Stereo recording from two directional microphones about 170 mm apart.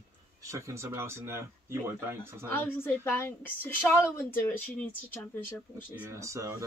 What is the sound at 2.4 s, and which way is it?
A woman's voice, 10° left (ahead or behind).